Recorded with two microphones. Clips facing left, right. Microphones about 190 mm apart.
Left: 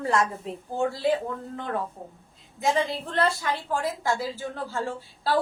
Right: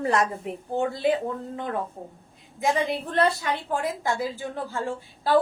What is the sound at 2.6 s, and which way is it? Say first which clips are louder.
A woman's voice: right 1 dB; 15° right (ahead or behind).